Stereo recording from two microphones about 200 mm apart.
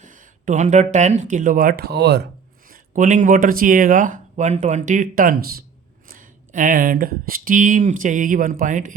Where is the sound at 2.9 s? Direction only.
40° right (ahead or behind).